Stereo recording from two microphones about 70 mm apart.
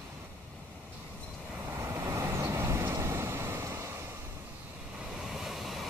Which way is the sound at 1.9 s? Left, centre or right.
Right.